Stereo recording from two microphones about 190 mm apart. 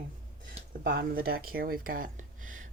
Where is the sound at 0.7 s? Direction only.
50° right (ahead or behind).